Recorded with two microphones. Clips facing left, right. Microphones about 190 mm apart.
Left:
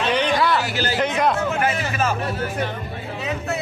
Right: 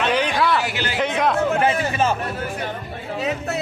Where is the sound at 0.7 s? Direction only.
35° left (ahead or behind).